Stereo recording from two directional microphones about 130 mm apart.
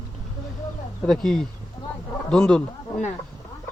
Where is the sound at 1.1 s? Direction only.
5° left (ahead or behind).